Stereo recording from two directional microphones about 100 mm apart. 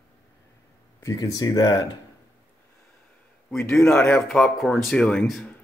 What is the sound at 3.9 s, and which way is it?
Speech, 15° left (ahead or behind).